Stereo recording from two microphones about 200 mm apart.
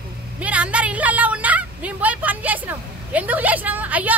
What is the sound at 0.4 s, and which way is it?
A woman's voice, 5° right (ahead or behind).